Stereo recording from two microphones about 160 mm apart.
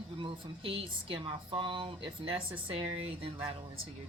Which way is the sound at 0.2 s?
35° right (ahead or behind).